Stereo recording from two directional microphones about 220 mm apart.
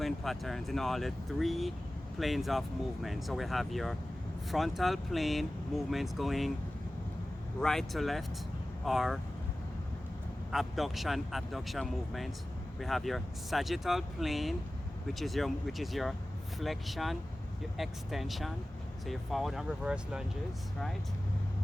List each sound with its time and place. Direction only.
0.0 s speech: centre (ahead or behind)
7.6 s speech: centre (ahead or behind)
10.5 s speech: centre (ahead or behind)